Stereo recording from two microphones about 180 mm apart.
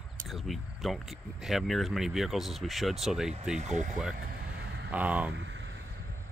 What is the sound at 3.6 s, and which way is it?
Speech, 40° right (ahead or behind).